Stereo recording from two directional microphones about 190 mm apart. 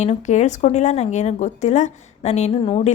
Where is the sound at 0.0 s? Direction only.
35° left (ahead or behind).